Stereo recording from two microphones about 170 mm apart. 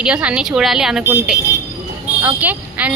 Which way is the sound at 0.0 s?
5° right (ahead or behind).